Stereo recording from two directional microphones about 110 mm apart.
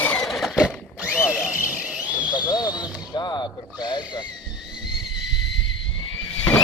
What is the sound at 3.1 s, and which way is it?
Music, 40° left (ahead or behind).